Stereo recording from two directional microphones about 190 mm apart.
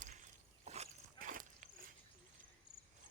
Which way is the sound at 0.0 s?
40° right (ahead or behind).